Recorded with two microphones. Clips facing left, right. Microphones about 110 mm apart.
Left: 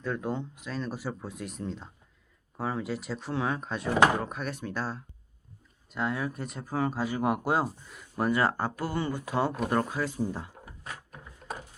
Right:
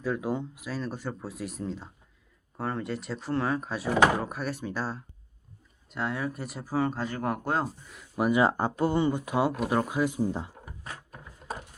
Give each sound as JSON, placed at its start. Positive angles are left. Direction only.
{"t": 0.0, "sound": "speech", "side_deg": -5}
{"t": 8.2, "sound": "speech", "side_deg": -15}
{"t": 11.1, "sound": "a sound", "side_deg": -5}